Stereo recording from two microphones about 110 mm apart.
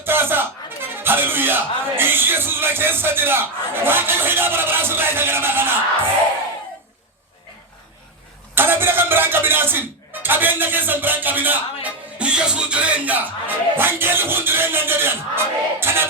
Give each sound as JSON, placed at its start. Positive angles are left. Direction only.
{"t": 0.0, "sound": "speech", "side_deg": -20}
{"t": 8.5, "sound": "music", "side_deg": -20}